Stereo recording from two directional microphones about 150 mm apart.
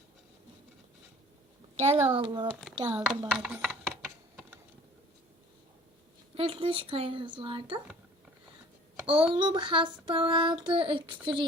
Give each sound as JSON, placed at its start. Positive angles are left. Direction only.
{"t": 1.8, "sound": "child singing", "side_deg": -40}
{"t": 2.7, "sound": "a woman's voice", "side_deg": -30}
{"t": 3.2, "sound": "typing", "side_deg": -5}
{"t": 6.3, "sound": "child singing", "side_deg": -40}
{"t": 9.3, "sound": "child singing", "side_deg": -30}